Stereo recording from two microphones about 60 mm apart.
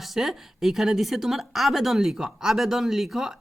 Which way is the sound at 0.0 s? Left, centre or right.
Centre.